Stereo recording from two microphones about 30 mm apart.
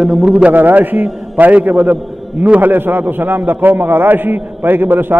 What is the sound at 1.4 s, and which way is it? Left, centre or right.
Speech, right.